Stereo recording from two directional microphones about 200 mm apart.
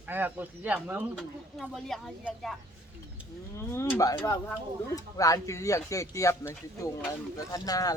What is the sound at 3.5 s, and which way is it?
Speech, 15° left (ahead or behind).